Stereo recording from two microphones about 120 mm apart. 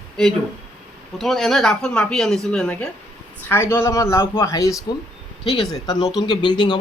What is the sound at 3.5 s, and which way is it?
Speech, 20° left (ahead or behind).